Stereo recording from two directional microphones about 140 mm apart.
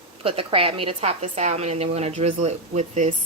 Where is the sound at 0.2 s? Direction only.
40° right (ahead or behind).